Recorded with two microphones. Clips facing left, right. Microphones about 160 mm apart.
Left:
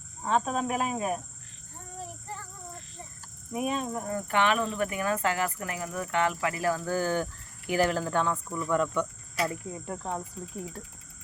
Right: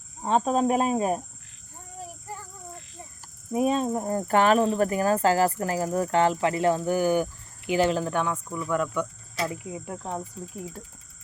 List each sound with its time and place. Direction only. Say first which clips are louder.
0.2 s speech: right 5 dB; 30° right (ahead or behind)
2.3 s child singing: right 2 dB; 10° right (ahead or behind)
3.5 s speech: right 6 dB; 30° right (ahead or behind)
8.0 s cricket: right 1 dB; 15° right (ahead or behind)
8.4 s speech: even; 5° right (ahead or behind)
9.5 s cricket: right 1 dB; 10° right (ahead or behind)